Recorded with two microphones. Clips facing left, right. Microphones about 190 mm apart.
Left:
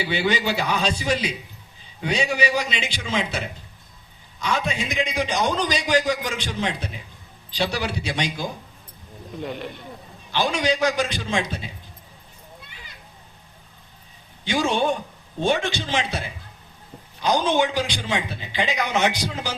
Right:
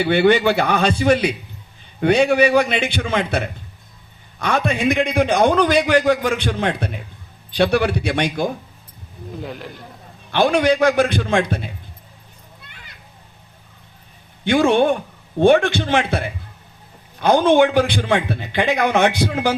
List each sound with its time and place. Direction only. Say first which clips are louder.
0.0 s a man's voice: right 9 dB; 55° right (ahead or behind)
9.4 s a man's voice: left 2 dB; centre (ahead or behind)
10.3 s a man's voice: right 7 dB; 55° right (ahead or behind)
14.4 s a man's voice: right 7 dB; 55° right (ahead or behind)